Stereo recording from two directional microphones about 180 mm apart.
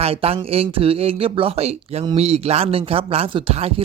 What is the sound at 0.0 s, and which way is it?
Speech, 35° right (ahead or behind).